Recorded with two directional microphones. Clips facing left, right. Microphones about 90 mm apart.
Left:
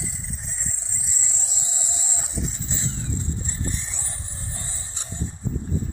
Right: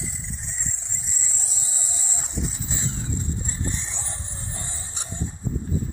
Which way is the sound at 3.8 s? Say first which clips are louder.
Right 2 dB; 25° right (ahead or behind).